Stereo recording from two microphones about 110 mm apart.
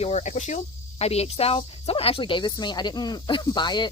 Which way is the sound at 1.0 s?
70° left (ahead or behind).